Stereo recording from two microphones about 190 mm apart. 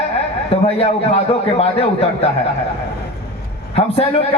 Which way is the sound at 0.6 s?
30° left (ahead or behind).